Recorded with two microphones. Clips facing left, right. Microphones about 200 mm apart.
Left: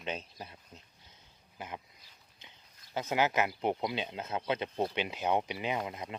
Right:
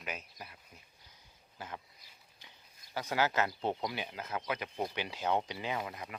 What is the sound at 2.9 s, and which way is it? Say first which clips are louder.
Speech: left 2 dB; 20° left (ahead or behind).